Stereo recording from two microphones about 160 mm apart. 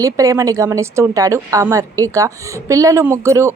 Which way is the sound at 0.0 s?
20° right (ahead or behind).